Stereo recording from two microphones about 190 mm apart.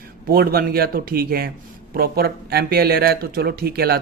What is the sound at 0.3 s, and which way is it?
Speech, 50° right (ahead or behind).